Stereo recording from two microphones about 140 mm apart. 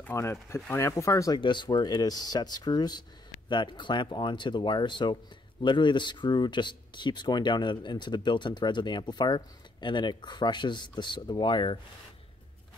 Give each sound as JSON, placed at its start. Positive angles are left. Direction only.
{"t": 0.0, "sound": "speech", "side_deg": 20}
{"t": 1.4, "sound": "speech", "side_deg": 35}